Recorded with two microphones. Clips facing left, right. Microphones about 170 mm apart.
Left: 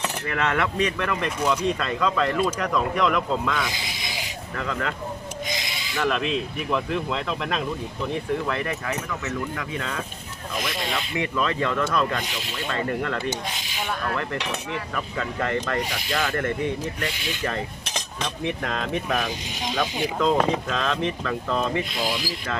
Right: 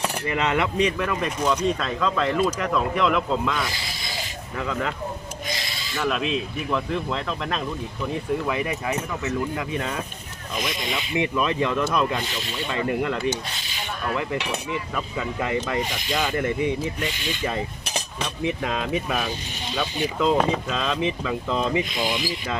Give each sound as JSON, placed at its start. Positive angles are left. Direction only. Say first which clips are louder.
{"t": 0.0, "sound": "speech", "louder": "right 1 dB", "side_deg": -15}
{"t": 6.0, "sound": "speech", "louder": "even", "side_deg": -5}
{"t": 8.9, "sound": "speech", "louder": "right 2 dB", "side_deg": -25}
{"t": 11.2, "sound": "speech", "louder": "right 2 dB", "side_deg": -15}
{"t": 12.2, "sound": "speech", "louder": "right 2 dB", "side_deg": 10}
{"t": 12.6, "sound": "speech", "louder": "right 2 dB", "side_deg": -10}
{"t": 14.9, "sound": "speech", "louder": "left 1 dB", "side_deg": -10}
{"t": 17.1, "sound": "speech", "louder": "right 1 dB", "side_deg": 10}
{"t": 17.4, "sound": "cutlery", "louder": "right 1 dB", "side_deg": -10}
{"t": 18.6, "sound": "speech", "louder": "right 2 dB", "side_deg": -5}